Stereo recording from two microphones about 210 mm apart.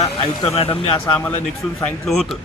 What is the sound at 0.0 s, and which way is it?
Speech, 15° left (ahead or behind).